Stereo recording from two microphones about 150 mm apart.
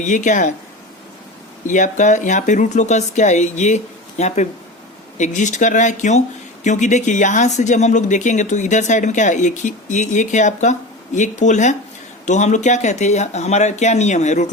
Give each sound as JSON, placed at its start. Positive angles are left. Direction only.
{"t": 0.0, "sound": "speech", "side_deg": 55}
{"t": 1.6, "sound": "speech", "side_deg": 55}